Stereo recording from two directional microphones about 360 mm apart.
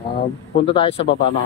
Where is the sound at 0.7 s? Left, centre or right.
Centre.